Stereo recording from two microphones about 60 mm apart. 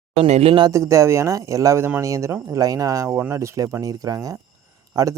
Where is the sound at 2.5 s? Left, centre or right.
Right.